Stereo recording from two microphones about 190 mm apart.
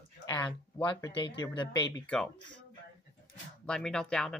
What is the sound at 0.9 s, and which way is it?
Speech, 25° left (ahead or behind).